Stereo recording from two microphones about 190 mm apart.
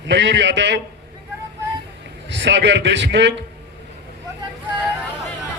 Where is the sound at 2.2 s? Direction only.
70° right (ahead or behind).